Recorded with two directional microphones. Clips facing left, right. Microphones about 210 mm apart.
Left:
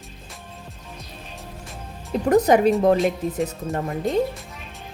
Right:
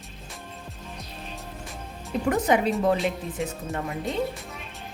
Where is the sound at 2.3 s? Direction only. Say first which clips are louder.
Left 8 dB; 40° left (ahead or behind).